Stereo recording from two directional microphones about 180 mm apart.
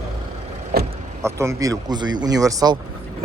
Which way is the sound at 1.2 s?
15° right (ahead or behind).